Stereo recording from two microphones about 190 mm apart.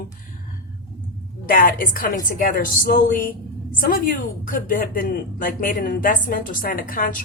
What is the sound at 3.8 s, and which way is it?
Speech, 50° left (ahead or behind).